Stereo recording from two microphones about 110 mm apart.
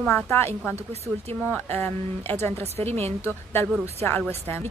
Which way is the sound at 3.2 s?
25° left (ahead or behind).